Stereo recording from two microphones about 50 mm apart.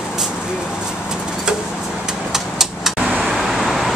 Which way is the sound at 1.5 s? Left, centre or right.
Centre.